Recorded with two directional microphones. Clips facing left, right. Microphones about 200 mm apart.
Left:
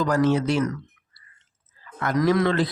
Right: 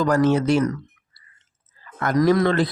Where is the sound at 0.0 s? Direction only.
50° right (ahead or behind).